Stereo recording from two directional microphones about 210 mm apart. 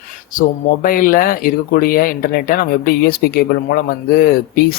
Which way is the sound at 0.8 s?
40° left (ahead or behind).